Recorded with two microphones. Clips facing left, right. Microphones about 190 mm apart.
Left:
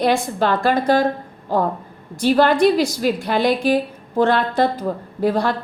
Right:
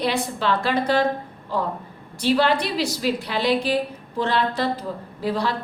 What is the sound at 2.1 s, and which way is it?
A woman's voice, 50° left (ahead or behind).